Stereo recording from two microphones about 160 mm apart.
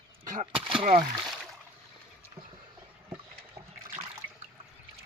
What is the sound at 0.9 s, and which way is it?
Speech, 55° right (ahead or behind).